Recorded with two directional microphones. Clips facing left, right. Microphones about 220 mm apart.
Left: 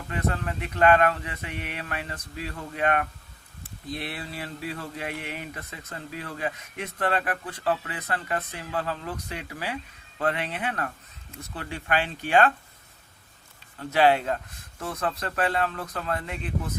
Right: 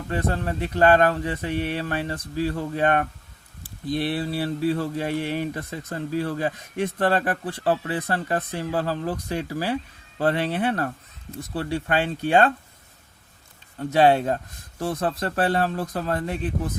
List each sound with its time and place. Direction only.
0.1 s speech: 35° right (ahead or behind)
13.7 s speech: 30° right (ahead or behind)